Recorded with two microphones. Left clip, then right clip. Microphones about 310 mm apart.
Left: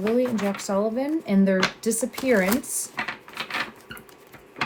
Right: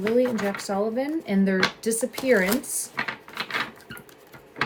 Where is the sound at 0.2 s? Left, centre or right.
Centre.